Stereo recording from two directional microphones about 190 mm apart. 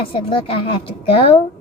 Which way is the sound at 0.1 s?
30° left (ahead or behind).